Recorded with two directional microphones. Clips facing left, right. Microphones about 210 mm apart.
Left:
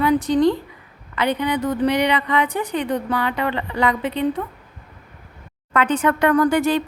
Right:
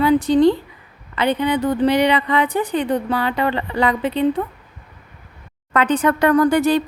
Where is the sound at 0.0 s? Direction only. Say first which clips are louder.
Right 3 dB; 30° right (ahead or behind).